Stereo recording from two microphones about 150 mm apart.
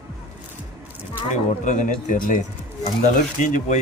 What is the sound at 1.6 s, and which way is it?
Speech, 55° left (ahead or behind).